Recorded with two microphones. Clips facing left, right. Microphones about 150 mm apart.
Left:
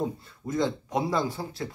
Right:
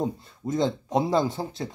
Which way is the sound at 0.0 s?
20° right (ahead or behind).